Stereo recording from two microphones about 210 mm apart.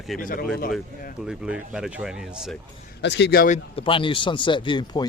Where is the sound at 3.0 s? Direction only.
55° left (ahead or behind).